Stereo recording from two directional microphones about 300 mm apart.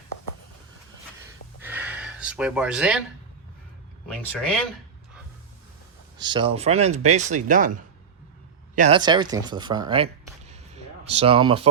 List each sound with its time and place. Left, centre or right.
1.6 s a sound: centre
4.1 s speech: centre
6.1 s speech: centre
8.7 s speech: right
9.0 s speech: centre